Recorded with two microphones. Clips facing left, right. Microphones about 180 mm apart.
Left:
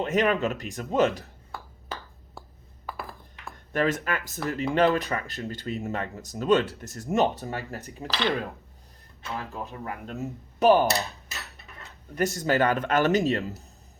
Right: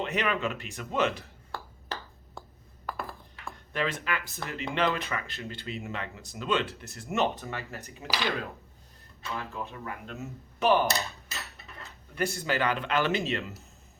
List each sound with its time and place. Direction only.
0.0 s speech: 40° left (ahead or behind)
1.5 s a sound: centre (ahead or behind)
3.7 s speech: 45° left (ahead or behind)
7.8 s speech: 10° right (ahead or behind)
9.4 s speech: 35° left (ahead or behind)
11.3 s a sound: centre (ahead or behind)
12.1 s speech: 40° left (ahead or behind)